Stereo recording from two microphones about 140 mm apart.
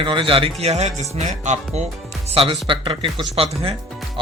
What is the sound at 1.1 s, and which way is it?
Music, 55° right (ahead or behind).